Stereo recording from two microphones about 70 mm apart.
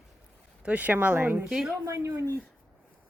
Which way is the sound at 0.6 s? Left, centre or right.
Right.